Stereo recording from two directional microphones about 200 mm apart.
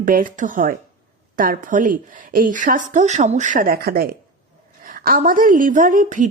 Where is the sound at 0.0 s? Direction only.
45° right (ahead or behind).